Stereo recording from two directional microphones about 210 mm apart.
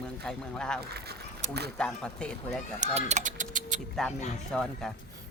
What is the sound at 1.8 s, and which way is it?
Speech, 5° left (ahead or behind).